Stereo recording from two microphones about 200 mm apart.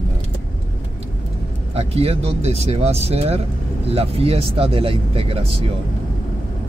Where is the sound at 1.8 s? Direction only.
30° right (ahead or behind).